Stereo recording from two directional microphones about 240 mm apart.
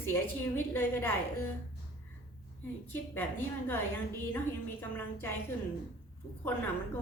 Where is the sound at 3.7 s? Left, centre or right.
Centre.